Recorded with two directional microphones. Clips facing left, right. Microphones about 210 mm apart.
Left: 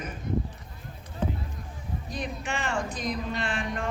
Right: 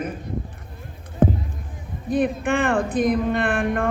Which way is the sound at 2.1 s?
55° right (ahead or behind).